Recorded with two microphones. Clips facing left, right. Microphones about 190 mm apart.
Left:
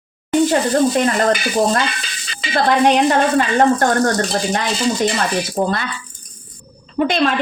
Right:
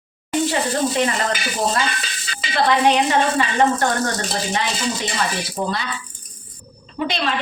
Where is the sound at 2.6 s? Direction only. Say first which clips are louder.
Left 3 dB; 45° left (ahead or behind).